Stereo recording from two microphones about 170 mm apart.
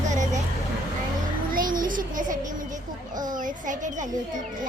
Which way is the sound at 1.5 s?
55° right (ahead or behind).